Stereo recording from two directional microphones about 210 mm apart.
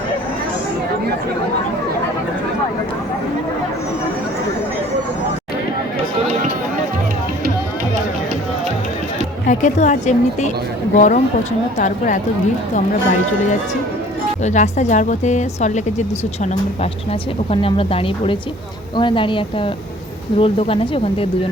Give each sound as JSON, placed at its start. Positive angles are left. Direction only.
{"t": 9.5, "sound": "speech", "side_deg": 35}
{"t": 14.4, "sound": "speech", "side_deg": 35}